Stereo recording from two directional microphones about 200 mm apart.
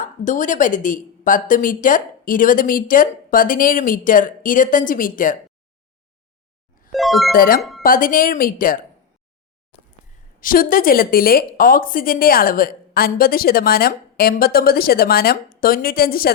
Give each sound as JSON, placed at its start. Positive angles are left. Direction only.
{"t": 0.0, "sound": "a woman's voice", "side_deg": 40}
{"t": 6.9, "sound": "music", "side_deg": 0}
{"t": 7.3, "sound": "a woman's voice", "side_deg": 45}
{"t": 10.4, "sound": "a woman's voice", "side_deg": 45}